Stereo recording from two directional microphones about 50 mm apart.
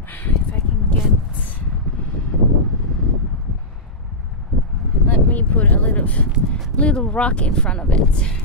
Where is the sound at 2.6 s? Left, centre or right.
Centre.